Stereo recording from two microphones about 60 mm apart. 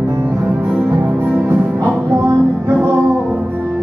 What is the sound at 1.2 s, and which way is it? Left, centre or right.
Music, right.